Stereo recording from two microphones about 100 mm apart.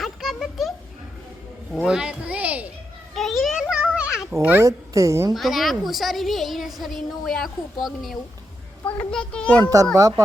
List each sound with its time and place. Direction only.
0.0 s a sound: centre (ahead or behind)
1.7 s speech: 5° right (ahead or behind)
3.2 s a sound: centre (ahead or behind)
4.6 s a child's voice: 30° right (ahead or behind)
5.3 s a woman's voice: centre (ahead or behind)
8.9 s a child's voice: 15° left (ahead or behind)
9.9 s a child's voice: 35° right (ahead or behind)